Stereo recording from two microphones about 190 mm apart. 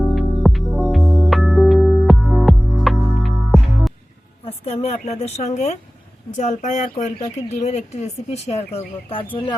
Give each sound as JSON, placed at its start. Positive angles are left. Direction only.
{"t": 0.1, "sound": "music", "side_deg": 0}
{"t": 4.4, "sound": "speech", "side_deg": 30}